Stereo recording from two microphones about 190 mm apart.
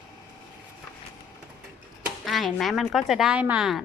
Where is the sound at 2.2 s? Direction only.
Centre (ahead or behind).